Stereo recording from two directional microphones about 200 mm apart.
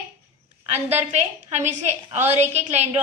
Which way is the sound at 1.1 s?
35° right (ahead or behind).